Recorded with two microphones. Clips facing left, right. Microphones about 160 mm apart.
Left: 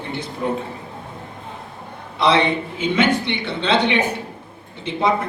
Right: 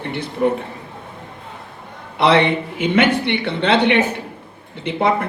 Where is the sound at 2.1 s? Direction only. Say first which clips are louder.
Right 3 dB; 60° right (ahead or behind).